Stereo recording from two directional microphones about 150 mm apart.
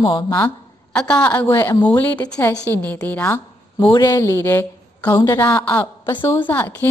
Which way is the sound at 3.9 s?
25° left (ahead or behind).